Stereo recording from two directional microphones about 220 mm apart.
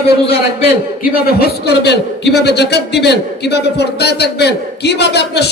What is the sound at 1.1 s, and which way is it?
A man's voice, 45° left (ahead or behind).